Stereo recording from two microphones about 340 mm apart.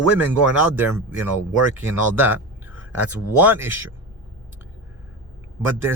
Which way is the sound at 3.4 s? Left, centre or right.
Centre.